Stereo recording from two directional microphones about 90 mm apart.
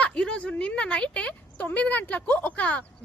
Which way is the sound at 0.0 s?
10° left (ahead or behind).